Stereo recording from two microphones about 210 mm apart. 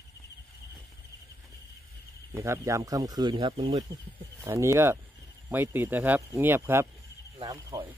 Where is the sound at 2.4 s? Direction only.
15° right (ahead or behind).